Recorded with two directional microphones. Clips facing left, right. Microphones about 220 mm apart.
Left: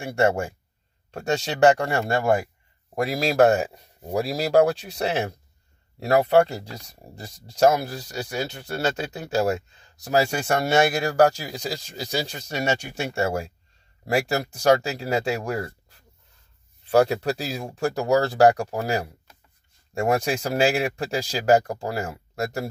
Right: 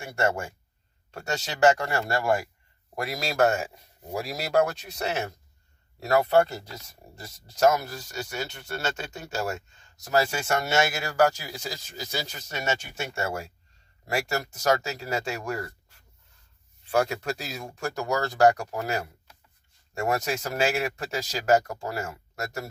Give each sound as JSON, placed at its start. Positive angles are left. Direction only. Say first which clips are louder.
{"t": 0.0, "sound": "speech", "louder": "left 6 dB", "side_deg": 30}
{"t": 6.7, "sound": "speech", "louder": "left 4 dB", "side_deg": 35}